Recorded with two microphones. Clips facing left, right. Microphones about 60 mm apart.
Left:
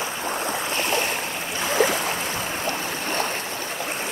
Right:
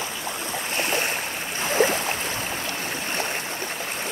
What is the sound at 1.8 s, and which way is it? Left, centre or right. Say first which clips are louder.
Boat: even; right.